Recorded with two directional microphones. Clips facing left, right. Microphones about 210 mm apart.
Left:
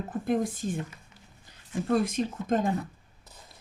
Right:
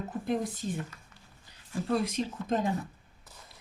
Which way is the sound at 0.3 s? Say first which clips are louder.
Left 4 dB; 50° left (ahead or behind).